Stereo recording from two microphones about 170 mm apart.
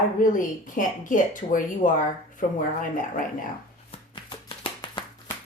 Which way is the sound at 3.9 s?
30° left (ahead or behind).